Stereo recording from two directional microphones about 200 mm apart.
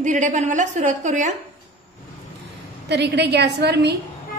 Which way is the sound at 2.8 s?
55° right (ahead or behind).